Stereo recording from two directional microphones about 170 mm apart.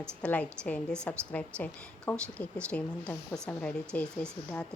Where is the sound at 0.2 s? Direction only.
10° left (ahead or behind).